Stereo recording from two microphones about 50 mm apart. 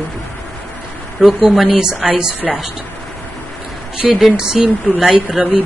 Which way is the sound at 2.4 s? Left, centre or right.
Centre.